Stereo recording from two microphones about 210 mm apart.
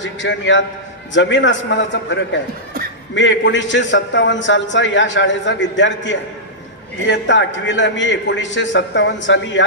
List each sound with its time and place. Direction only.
0.0 s a man's voice: 60° left (ahead or behind)